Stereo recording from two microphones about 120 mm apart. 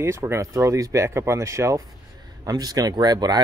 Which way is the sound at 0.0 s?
20° right (ahead or behind).